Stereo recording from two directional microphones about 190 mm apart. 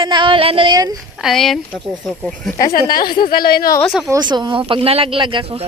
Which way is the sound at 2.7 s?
50° left (ahead or behind).